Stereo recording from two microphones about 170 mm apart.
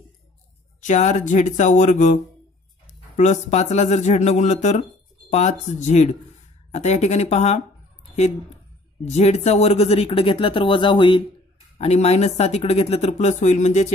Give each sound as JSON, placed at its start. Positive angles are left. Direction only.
{"t": 0.7, "sound": "speech", "side_deg": 45}
{"t": 9.0, "sound": "speech", "side_deg": 40}